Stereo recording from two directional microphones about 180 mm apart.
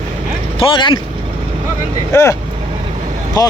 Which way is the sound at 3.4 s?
20° left (ahead or behind).